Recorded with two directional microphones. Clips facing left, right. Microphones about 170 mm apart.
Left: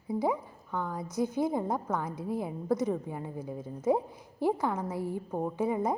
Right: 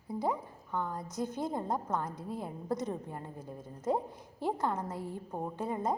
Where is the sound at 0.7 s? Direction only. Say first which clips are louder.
Left 1 dB; 15° right (ahead or behind).